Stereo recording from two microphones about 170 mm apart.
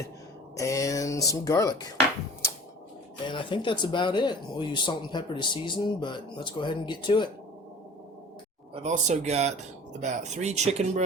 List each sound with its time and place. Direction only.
0.5 s speech: 20° left (ahead or behind)
3.2 s speech: 30° left (ahead or behind)
8.7 s speech: 45° right (ahead or behind)